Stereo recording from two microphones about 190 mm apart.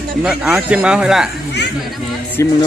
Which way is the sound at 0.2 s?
5° right (ahead or behind).